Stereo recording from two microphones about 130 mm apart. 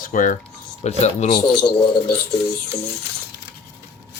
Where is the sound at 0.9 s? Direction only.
55° left (ahead or behind).